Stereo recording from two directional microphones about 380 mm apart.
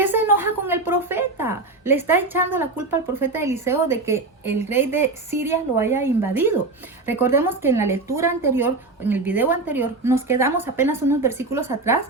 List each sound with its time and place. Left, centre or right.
0.0 s a woman's voice: centre